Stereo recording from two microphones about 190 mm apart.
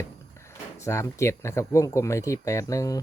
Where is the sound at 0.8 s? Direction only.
15° left (ahead or behind).